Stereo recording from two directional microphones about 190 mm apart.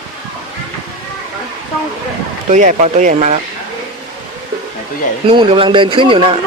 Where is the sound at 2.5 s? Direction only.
40° right (ahead or behind).